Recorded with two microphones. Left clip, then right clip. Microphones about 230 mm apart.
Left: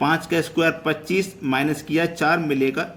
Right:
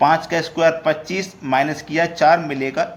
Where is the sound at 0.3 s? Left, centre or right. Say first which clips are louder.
Right 4 dB; centre.